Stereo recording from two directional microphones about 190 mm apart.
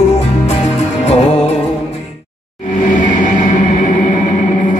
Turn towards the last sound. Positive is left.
turn(degrees=45)  # may be behind; listen again after turning